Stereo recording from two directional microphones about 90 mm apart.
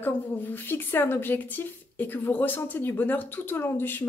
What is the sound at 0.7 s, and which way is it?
Speech, 25° left (ahead or behind).